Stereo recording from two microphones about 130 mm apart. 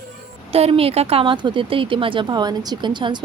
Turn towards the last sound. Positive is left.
turn(degrees=-35)  # may be behind; listen again after turning